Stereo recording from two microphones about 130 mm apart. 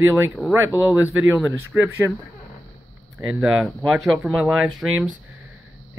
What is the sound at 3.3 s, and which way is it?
Speech, 5° right (ahead or behind).